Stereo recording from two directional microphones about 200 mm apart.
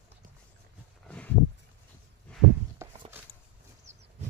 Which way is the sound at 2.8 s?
15° right (ahead or behind).